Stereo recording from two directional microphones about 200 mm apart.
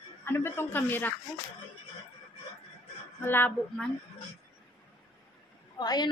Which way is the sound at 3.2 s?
10° left (ahead or behind).